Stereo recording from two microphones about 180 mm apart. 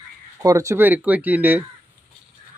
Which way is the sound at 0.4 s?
15° right (ahead or behind).